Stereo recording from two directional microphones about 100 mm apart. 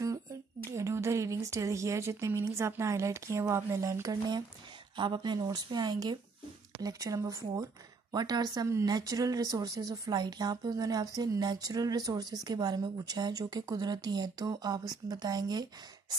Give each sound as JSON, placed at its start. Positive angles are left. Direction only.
{"t": 0.7, "sound": "speech", "side_deg": -30}
{"t": 4.9, "sound": "a woman's voice", "side_deg": -50}